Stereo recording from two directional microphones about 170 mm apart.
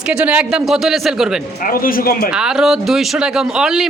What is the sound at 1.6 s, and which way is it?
Speech, 55° left (ahead or behind).